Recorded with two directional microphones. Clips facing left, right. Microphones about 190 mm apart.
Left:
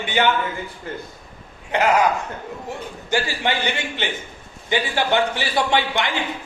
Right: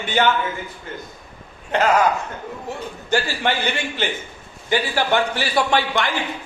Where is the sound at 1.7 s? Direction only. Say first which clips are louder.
Right 1 dB; 15° left (ahead or behind).